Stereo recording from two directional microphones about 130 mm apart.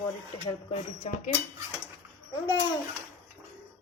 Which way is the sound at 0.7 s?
40° left (ahead or behind).